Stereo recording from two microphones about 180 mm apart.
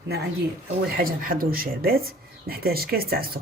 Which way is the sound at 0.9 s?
55° right (ahead or behind).